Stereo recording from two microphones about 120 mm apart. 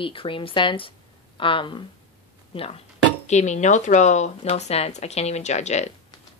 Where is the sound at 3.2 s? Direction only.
75° left (ahead or behind).